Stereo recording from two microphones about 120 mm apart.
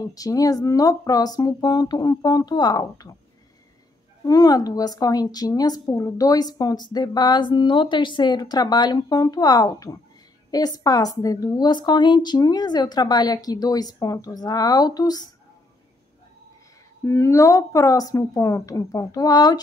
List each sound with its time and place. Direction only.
0.0 s a woman's voice: 30° left (ahead or behind)
4.2 s a woman's voice: 30° left (ahead or behind)
17.0 s a woman's voice: 25° left (ahead or behind)